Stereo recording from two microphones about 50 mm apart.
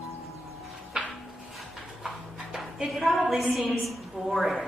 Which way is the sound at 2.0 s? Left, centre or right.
Centre.